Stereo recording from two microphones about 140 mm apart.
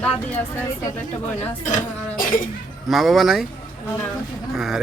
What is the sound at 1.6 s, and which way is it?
Speech, 60° left (ahead or behind).